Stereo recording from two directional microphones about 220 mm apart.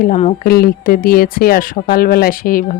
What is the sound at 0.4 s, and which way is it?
Speech, 45° left (ahead or behind).